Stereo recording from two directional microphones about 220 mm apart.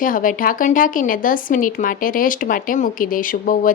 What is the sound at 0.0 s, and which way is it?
Speech, 40° left (ahead or behind).